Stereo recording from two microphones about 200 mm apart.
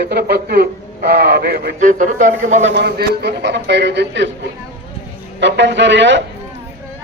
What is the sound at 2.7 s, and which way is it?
Speech, 55° right (ahead or behind).